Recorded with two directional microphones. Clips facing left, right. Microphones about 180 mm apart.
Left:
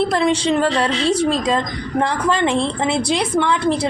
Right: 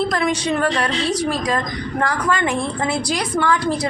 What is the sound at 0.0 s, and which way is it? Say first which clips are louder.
A woman's voice: left 3 dB; 30° left (ahead or behind).